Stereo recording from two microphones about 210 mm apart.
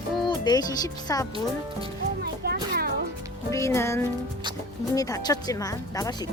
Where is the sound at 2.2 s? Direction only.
45° right (ahead or behind).